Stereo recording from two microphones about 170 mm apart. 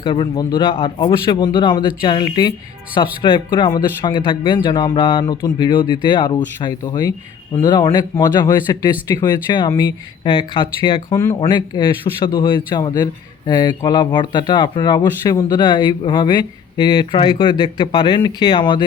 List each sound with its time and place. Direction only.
0.0 s speech: 30° left (ahead or behind)